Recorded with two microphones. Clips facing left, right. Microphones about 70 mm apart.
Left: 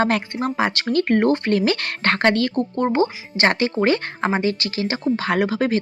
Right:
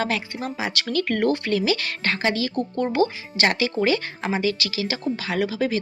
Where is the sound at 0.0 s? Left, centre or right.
Left.